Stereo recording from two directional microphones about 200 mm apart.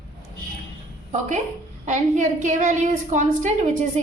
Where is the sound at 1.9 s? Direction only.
40° right (ahead or behind).